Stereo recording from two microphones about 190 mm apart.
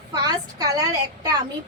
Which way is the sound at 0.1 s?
20° right (ahead or behind).